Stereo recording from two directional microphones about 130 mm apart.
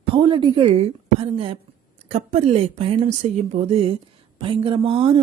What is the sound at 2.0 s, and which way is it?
Speech, 60° right (ahead or behind).